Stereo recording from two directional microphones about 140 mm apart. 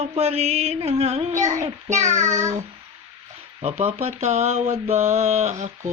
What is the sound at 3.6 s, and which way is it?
Mantra, 50° right (ahead or behind).